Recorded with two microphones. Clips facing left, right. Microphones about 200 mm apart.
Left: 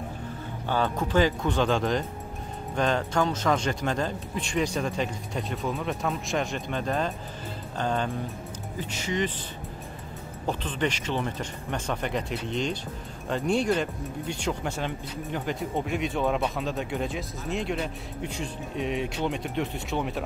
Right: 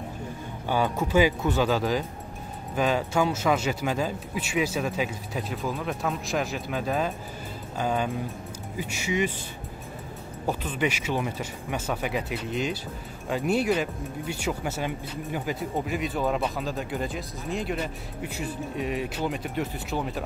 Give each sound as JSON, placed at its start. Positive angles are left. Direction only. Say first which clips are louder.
{"t": 0.7, "sound": "speech", "louder": "right 1 dB", "side_deg": -10}
{"t": 10.4, "sound": "speech", "louder": "right 1 dB", "side_deg": -10}